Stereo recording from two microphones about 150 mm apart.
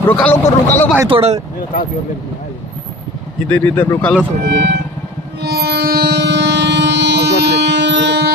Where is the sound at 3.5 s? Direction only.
10° left (ahead or behind).